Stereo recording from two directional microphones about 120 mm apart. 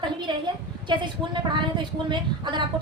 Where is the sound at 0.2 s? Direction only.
40° right (ahead or behind).